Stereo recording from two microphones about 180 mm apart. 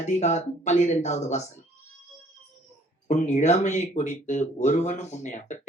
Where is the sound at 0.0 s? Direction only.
40° left (ahead or behind).